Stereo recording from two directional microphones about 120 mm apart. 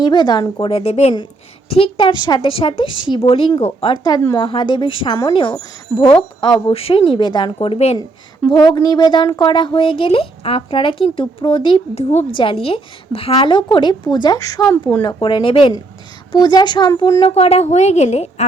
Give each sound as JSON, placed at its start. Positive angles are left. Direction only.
{"t": 0.0, "sound": "speech", "side_deg": 40}
{"t": 0.6, "sound": "a woman's voice", "side_deg": 55}
{"t": 1.7, "sound": "speech", "side_deg": 50}
{"t": 2.5, "sound": "speech", "side_deg": 50}
{"t": 6.7, "sound": "speech", "side_deg": 50}
{"t": 7.6, "sound": "a woman's voice", "side_deg": 55}
{"t": 8.4, "sound": "speech", "side_deg": 40}
{"t": 15.0, "sound": "speech", "side_deg": 40}
{"t": 17.2, "sound": "a woman's voice", "side_deg": 60}